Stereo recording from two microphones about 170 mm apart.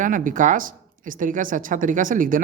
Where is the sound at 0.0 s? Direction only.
50° right (ahead or behind).